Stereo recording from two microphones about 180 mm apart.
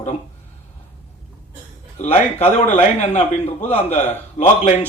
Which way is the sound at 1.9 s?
35° left (ahead or behind).